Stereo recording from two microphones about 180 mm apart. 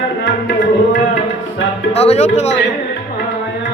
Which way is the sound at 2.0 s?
35° left (ahead or behind).